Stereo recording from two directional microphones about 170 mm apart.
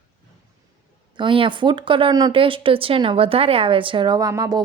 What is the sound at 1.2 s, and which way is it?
Speech, 30° right (ahead or behind).